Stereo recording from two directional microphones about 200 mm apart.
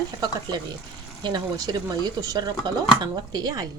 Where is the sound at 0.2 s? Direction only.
20° right (ahead or behind).